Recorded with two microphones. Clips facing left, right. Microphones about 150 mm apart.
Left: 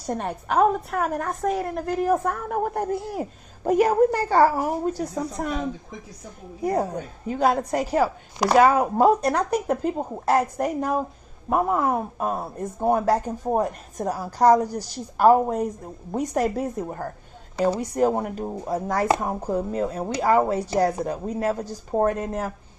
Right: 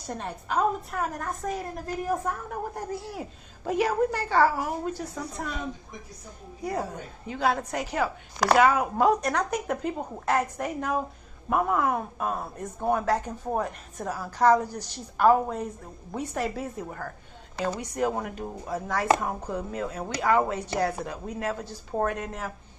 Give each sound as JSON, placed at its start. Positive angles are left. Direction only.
{"t": 0.1, "sound": "a woman's voice", "side_deg": 55}
{"t": 6.6, "sound": "speech", "side_deg": 40}